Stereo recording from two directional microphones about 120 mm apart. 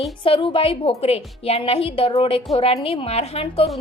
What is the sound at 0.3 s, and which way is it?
Speech, 50° left (ahead or behind).